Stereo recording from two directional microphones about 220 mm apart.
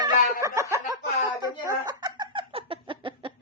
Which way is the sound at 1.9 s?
20° right (ahead or behind).